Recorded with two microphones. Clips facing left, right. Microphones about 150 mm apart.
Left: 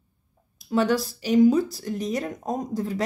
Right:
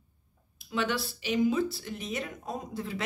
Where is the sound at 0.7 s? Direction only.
40° left (ahead or behind).